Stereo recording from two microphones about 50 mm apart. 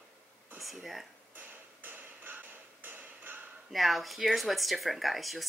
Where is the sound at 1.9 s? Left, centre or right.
Right.